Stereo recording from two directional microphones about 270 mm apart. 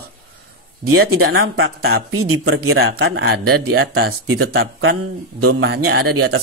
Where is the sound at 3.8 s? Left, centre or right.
Right.